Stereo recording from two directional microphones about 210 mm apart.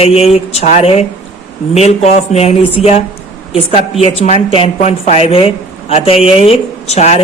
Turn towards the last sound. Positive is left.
turn(degrees=30)  # may be behind; listen again after turning